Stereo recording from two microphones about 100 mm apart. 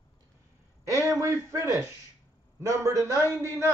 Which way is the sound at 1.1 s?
30° right (ahead or behind).